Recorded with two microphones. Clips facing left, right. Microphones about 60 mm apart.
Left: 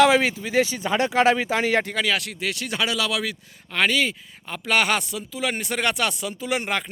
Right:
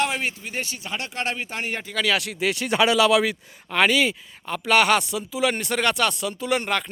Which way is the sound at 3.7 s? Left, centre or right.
Centre.